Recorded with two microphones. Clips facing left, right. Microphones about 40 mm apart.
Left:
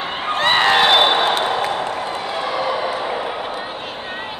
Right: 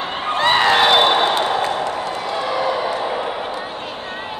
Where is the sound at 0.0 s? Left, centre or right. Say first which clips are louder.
Right 1 dB; centre.